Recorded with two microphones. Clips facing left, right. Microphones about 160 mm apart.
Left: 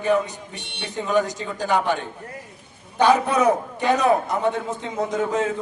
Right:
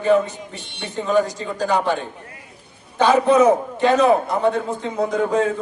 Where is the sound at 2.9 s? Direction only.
15° left (ahead or behind).